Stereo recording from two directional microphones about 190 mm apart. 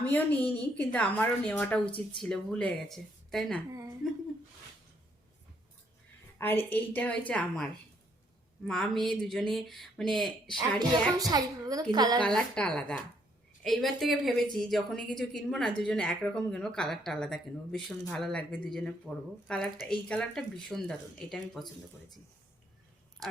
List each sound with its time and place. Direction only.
0.1 s a woman's voice: 10° left (ahead or behind)
3.7 s a sound: 15° right (ahead or behind)
6.4 s a woman's voice: 10° left (ahead or behind)
11.2 s a child's voice: 20° right (ahead or behind)
12.2 s a woman's voice: 5° left (ahead or behind)
23.2 s a sound: 20° right (ahead or behind)